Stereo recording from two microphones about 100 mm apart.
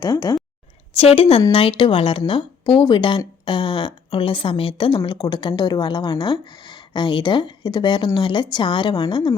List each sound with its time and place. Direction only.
0.0 s speech: 40° left (ahead or behind)
0.9 s a woman's voice: 75° left (ahead or behind); by 4.9 s 60° left (ahead or behind)
5.0 s speech: 45° left (ahead or behind)